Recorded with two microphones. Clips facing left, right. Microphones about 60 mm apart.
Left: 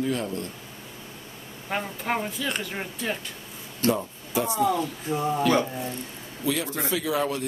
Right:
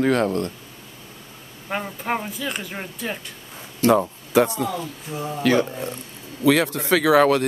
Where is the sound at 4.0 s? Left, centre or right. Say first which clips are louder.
Right 9 dB; right.